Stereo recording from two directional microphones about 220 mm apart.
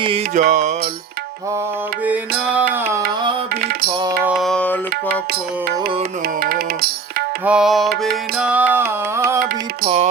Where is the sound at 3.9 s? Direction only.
20° right (ahead or behind).